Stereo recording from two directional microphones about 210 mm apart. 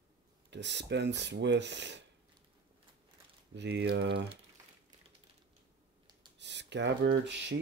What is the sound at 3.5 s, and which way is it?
Speech, 55° right (ahead or behind).